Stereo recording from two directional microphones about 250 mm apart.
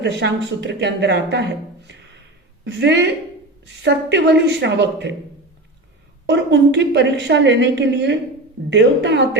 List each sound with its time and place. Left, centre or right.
0.0 s a woman's voice: right
6.2 s a woman's voice: right